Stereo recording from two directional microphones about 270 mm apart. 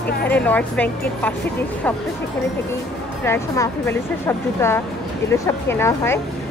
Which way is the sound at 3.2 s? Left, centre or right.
Centre.